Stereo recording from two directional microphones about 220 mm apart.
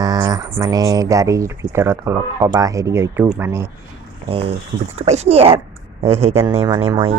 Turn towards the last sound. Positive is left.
turn(degrees=-25)  # may be behind; listen again after turning